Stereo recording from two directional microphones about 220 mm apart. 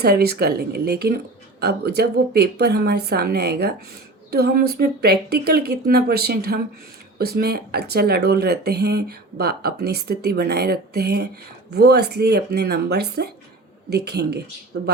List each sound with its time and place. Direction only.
0.0 s speech: 45° right (ahead or behind)